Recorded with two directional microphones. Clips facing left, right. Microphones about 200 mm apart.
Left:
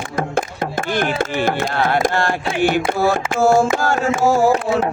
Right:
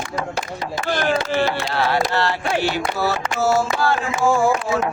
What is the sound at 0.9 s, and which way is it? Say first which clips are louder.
Chopping: even; 55° left (ahead or behind).